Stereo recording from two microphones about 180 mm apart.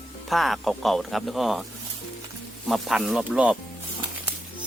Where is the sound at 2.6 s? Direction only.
Centre (ahead or behind).